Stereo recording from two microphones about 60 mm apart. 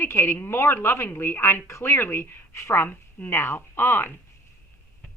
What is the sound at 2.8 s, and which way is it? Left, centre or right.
Speech, left.